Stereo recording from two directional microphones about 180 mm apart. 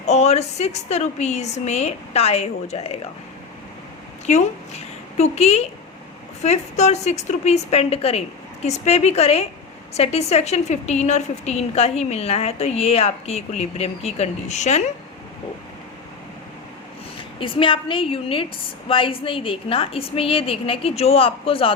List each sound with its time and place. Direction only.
0.0 s a woman's voice: 35° left (ahead or behind)
4.3 s a woman's voice: 40° left (ahead or behind)
17.4 s a woman's voice: 30° left (ahead or behind)